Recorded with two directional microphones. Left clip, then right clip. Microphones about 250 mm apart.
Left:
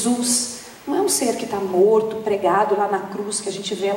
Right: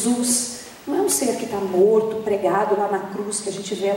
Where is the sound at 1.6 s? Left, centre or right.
Right.